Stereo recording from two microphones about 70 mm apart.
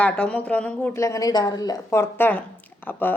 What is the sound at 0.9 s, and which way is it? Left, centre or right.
Speech, left.